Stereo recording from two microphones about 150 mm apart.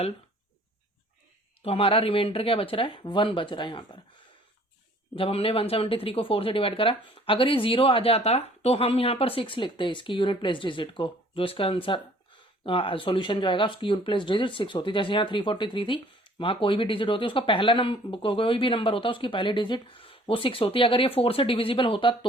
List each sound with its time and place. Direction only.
1.6 s speech: 40° left (ahead or behind)
5.1 s speech: 40° left (ahead or behind)